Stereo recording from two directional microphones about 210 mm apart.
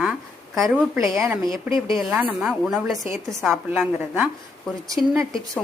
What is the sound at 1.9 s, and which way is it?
A woman's voice, centre (ahead or behind).